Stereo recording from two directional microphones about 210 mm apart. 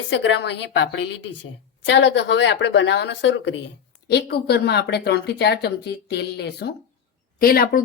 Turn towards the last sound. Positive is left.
turn(degrees=45)  # may be behind; listen again after turning